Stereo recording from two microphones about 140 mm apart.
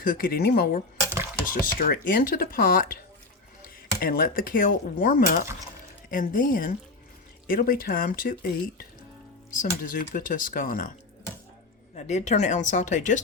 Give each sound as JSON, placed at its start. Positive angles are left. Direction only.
{"t": 0.0, "sound": "speech", "side_deg": 90}
{"t": 4.0, "sound": "a woman's voice", "side_deg": 90}
{"t": 7.4, "sound": "speech", "side_deg": 90}
{"t": 9.6, "sound": "speech", "side_deg": 70}
{"t": 11.9, "sound": "speech", "side_deg": 55}